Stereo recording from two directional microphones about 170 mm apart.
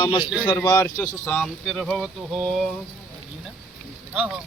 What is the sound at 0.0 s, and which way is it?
Speech, 30° left (ahead or behind).